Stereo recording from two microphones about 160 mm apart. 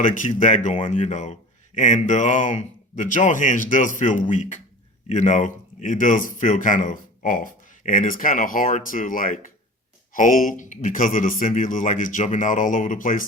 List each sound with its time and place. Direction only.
0.0 s a man's voice: 55° left (ahead or behind)